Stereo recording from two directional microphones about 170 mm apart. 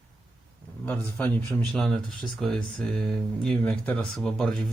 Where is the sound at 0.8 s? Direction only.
10° left (ahead or behind).